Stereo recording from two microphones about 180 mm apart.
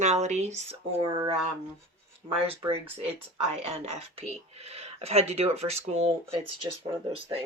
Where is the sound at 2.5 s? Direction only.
30° right (ahead or behind).